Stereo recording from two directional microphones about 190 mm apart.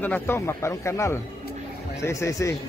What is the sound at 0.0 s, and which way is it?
Speech, 10° left (ahead or behind).